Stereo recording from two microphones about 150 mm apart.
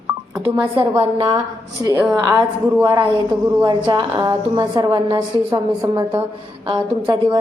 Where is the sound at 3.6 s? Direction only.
30° right (ahead or behind).